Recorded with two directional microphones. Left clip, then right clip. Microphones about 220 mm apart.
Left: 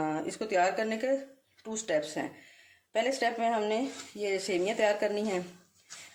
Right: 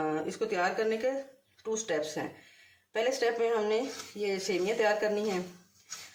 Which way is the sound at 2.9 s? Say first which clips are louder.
Even; 50° left (ahead or behind).